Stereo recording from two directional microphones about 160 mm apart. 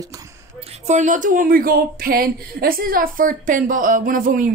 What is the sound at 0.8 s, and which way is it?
Speech, 50° right (ahead or behind).